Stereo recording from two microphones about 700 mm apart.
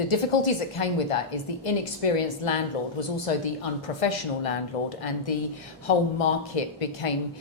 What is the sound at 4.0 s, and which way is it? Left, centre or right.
A woman's voice, left.